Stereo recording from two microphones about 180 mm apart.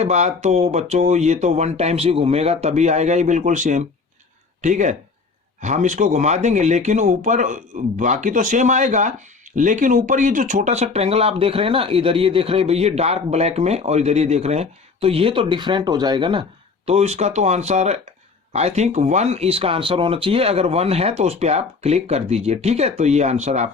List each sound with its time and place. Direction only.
0.0 s speech: 40° right (ahead or behind)
16.8 s speech: 35° right (ahead or behind)